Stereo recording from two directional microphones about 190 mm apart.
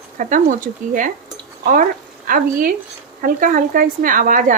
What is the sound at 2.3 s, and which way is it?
Speech, 45° right (ahead or behind).